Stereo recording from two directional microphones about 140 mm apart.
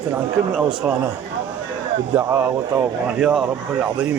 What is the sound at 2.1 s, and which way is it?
Speech, 20° right (ahead or behind).